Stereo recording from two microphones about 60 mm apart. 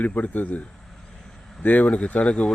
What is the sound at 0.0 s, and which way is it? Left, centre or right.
Speech, left.